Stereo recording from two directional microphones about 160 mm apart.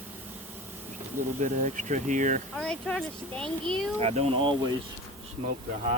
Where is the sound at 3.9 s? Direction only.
40° right (ahead or behind).